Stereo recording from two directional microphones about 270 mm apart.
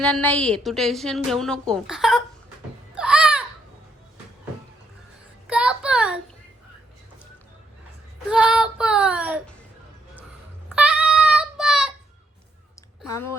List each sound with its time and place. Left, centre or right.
0.0 s a woman's voice: centre
2.9 s a sound: centre
5.5 s child singing: centre
8.3 s child singing: centre
10.8 s child singing: centre
13.1 s a sound: centre